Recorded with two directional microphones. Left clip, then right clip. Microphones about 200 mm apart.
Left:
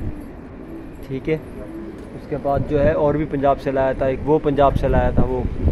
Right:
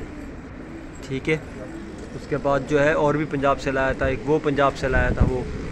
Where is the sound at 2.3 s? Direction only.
5° right (ahead or behind); by 5.1 s 15° left (ahead or behind).